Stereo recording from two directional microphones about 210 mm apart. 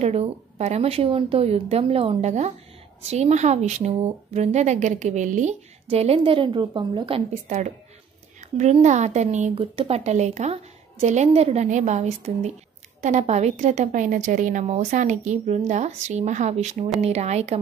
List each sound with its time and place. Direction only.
0.0 s speech: 30° right (ahead or behind)